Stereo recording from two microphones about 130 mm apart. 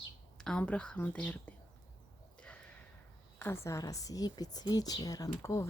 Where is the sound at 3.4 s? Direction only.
20° left (ahead or behind).